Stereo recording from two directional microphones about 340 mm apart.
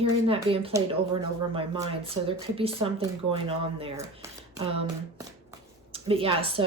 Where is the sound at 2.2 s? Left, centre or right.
Centre.